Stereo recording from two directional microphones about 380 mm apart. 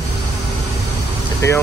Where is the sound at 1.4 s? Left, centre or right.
Centre.